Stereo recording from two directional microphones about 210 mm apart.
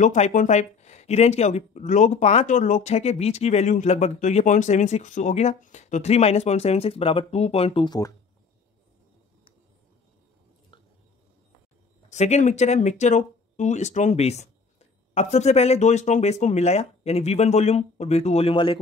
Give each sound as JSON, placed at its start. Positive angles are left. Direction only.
{"t": 0.0, "sound": "speech", "side_deg": 35}
{"t": 12.1, "sound": "speech", "side_deg": 35}